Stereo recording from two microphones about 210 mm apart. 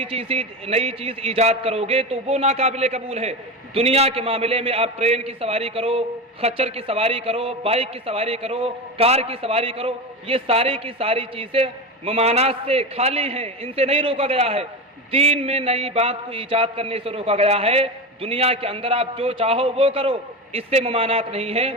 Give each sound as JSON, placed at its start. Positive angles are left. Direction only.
{"t": 0.0, "sound": "a man's voice", "side_deg": -25}